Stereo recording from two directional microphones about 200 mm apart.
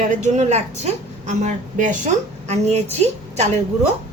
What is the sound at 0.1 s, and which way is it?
A woman's voice, 35° right (ahead or behind).